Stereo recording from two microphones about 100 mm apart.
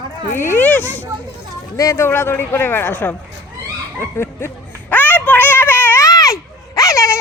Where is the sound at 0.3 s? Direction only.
20° left (ahead or behind).